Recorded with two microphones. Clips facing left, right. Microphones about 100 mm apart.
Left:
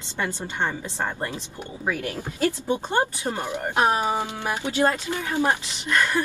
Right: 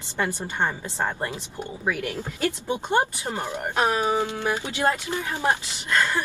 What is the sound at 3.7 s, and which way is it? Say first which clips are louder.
Speech: left 1 dB; 20° left (ahead or behind).